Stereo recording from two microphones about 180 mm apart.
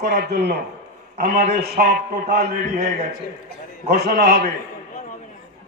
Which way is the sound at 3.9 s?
60° right (ahead or behind).